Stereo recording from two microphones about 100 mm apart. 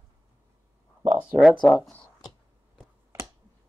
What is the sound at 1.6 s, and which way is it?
Speech, 15° left (ahead or behind).